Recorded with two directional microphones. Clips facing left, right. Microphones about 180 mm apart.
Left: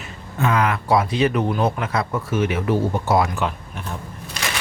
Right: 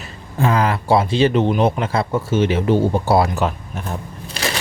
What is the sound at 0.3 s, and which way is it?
Speech, 30° right (ahead or behind).